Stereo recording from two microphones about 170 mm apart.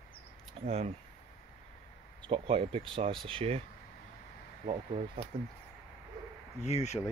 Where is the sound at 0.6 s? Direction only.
35° right (ahead or behind).